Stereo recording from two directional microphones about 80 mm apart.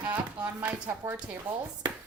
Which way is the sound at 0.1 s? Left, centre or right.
Right.